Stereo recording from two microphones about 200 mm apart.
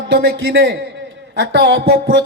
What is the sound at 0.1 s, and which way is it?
A man's voice, 50° right (ahead or behind).